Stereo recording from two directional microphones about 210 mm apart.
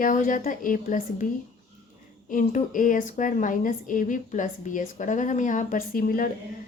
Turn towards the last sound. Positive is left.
turn(degrees=40)  # may be behind; listen again after turning